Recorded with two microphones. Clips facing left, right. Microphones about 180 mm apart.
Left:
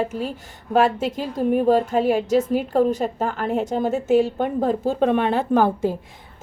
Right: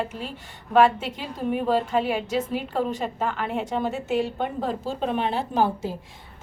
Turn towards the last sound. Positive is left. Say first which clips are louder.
# left 5 dB
turn(degrees=55)  # may be behind; listen again after turning